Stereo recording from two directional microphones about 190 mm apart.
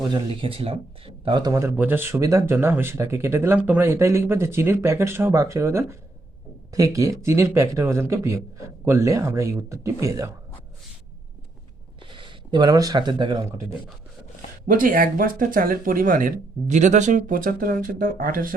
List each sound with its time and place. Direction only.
0.1 s speech: 25° right (ahead or behind)
12.0 s speech: 25° right (ahead or behind)
14.7 s speech: 45° right (ahead or behind)